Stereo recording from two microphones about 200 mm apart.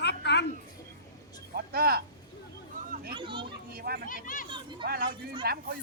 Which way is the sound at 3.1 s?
25° right (ahead or behind).